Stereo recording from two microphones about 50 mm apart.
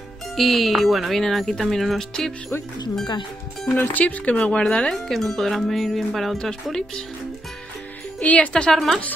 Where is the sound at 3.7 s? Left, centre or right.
Left.